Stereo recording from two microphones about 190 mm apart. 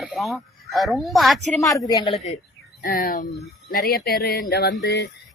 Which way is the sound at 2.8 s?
50° left (ahead or behind).